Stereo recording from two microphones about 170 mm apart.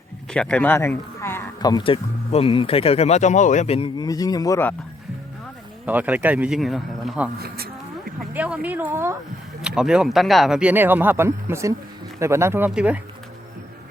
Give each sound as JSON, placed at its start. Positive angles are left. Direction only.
{"t": 0.3, "sound": "speech", "side_deg": 5}
{"t": 1.8, "sound": "speech", "side_deg": 35}
{"t": 5.8, "sound": "speech", "side_deg": -10}
{"t": 7.3, "sound": "a sound", "side_deg": -65}
{"t": 8.3, "sound": "speech", "side_deg": -5}